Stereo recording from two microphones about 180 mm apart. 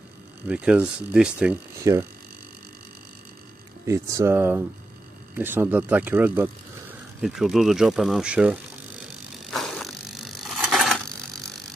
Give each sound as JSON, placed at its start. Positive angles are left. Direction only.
{"t": 0.5, "sound": "speech", "side_deg": -5}
{"t": 1.8, "sound": "speech", "side_deg": -20}
{"t": 3.8, "sound": "speech", "side_deg": -15}
{"t": 9.5, "sound": "mechanisms", "side_deg": 0}